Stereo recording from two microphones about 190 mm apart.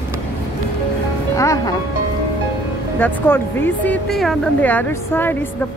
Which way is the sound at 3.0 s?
10° left (ahead or behind).